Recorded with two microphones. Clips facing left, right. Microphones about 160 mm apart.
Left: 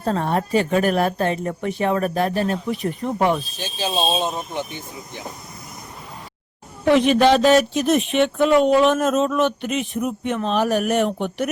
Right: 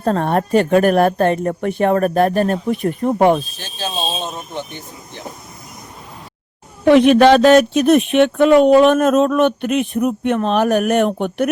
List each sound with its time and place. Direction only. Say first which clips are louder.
0.0 s a woman's voice: right 4 dB; 60° right (ahead or behind)
3.6 s speech: left 2 dB; 15° left (ahead or behind)
6.8 s speech: right 6 dB; 60° right (ahead or behind)